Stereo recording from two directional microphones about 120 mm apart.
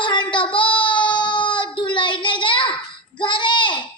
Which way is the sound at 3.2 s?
40° left (ahead or behind).